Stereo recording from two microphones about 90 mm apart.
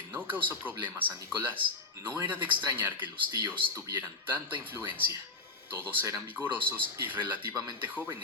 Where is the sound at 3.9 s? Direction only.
20° right (ahead or behind).